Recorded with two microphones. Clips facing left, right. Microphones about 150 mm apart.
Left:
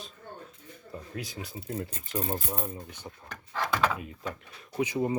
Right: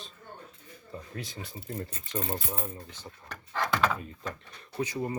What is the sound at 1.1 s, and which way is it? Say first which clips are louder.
Speech: left 4 dB; 5° left (ahead or behind).